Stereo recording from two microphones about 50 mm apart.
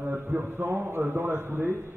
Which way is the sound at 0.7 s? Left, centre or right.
Right.